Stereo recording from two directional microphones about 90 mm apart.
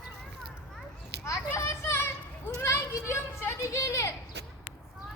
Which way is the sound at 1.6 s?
30° left (ahead or behind).